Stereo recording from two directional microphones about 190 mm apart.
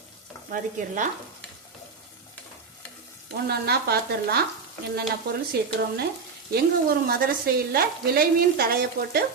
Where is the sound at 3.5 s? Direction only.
55° right (ahead or behind).